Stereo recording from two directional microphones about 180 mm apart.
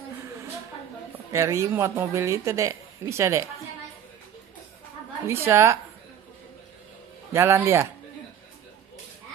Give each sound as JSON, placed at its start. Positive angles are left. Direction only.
{"t": 1.3, "sound": "speech", "side_deg": -15}
{"t": 5.2, "sound": "speech", "side_deg": -15}
{"t": 7.3, "sound": "speech", "side_deg": -15}